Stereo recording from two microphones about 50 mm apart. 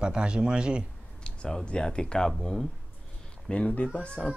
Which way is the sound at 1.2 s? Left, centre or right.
Centre.